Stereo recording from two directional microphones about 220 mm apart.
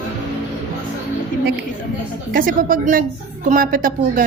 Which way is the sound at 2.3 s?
40° right (ahead or behind).